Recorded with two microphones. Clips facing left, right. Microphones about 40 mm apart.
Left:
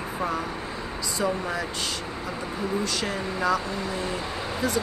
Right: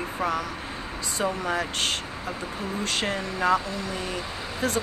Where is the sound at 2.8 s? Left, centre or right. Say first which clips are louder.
Right 1 dB; right.